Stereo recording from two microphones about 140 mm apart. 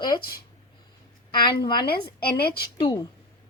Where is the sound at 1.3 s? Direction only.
35° left (ahead or behind).